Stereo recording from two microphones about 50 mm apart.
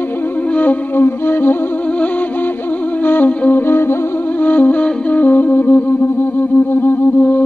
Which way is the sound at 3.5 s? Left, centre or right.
Left.